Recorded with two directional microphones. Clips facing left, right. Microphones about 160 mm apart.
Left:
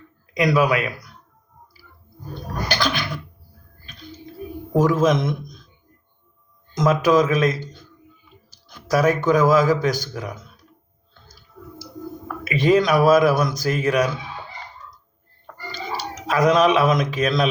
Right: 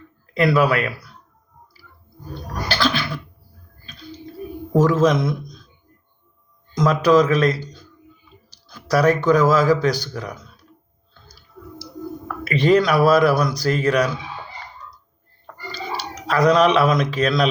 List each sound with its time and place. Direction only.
0.3 s speech: 15° left (ahead or behind)
2.6 s a sound: 20° left (ahead or behind)
4.8 s speech: 15° left (ahead or behind)
6.7 s speech: 20° left (ahead or behind)
7.6 s a sound: 25° left (ahead or behind)
8.6 s speech: 15° left (ahead or behind)
12.5 s speech: 15° left (ahead or behind)
16.2 s speech: 15° left (ahead or behind)